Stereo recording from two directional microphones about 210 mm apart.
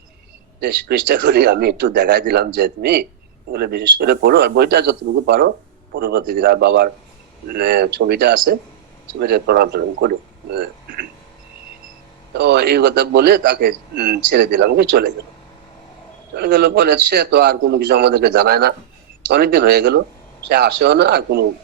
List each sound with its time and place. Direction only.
0.6 s a man's voice: 55° right (ahead or behind)
12.3 s a man's voice: 55° right (ahead or behind)
16.3 s a man's voice: 55° right (ahead or behind)